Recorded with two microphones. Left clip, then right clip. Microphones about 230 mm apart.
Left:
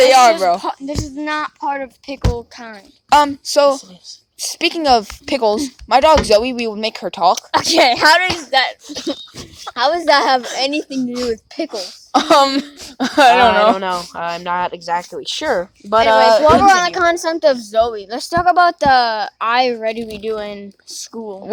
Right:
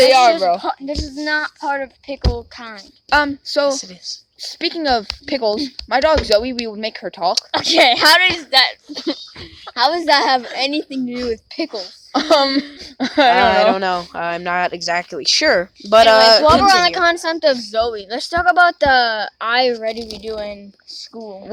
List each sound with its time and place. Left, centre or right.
0.0 s a sound: left
0.6 s speech: centre
3.1 s speech: left
7.5 s a woman's voice: centre
11.7 s speech: left
13.7 s speech: right
16.4 s a woman's voice: centre